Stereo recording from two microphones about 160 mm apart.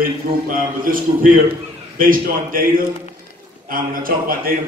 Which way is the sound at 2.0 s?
60° right (ahead or behind).